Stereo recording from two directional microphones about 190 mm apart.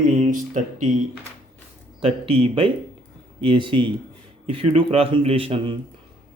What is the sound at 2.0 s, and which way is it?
A man's voice, 30° right (ahead or behind).